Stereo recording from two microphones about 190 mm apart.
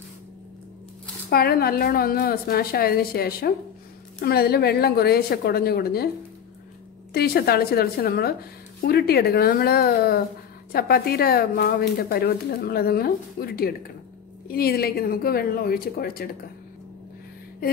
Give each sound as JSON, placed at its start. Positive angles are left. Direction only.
{"t": 1.3, "sound": "a woman's voice", "side_deg": 55}
{"t": 7.2, "sound": "a woman's voice", "side_deg": 55}